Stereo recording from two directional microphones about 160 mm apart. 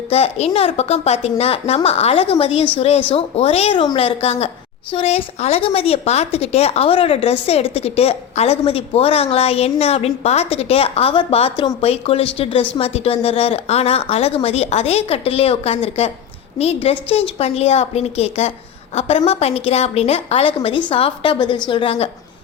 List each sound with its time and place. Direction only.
0.1 s speech: 40° left (ahead or behind)